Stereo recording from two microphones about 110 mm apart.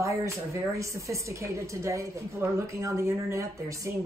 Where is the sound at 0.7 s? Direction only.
30° right (ahead or behind).